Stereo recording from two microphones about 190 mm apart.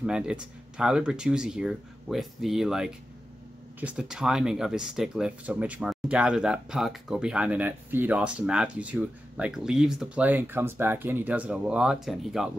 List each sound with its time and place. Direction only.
0.0 s speech: 5° right (ahead or behind)